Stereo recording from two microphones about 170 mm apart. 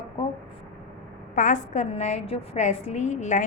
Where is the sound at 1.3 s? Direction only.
50° left (ahead or behind).